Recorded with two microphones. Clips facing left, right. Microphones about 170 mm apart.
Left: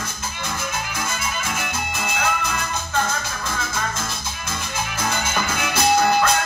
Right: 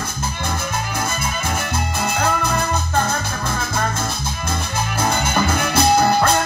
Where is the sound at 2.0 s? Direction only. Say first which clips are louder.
Right 4 dB; 35° right (ahead or behind).